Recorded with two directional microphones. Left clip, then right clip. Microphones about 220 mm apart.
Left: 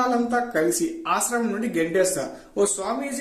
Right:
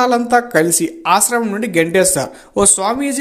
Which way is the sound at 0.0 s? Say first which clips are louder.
Right 9 dB; 40° right (ahead or behind).